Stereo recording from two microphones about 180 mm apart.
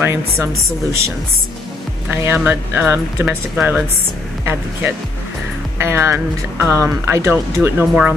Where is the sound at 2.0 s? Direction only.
15° right (ahead or behind).